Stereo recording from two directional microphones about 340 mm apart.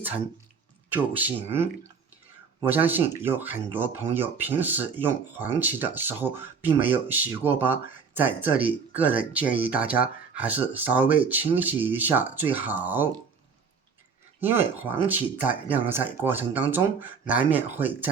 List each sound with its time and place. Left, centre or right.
0.9 s speech: centre
1.4 s speech: centre
2.6 s speech: centre
14.8 s speech: centre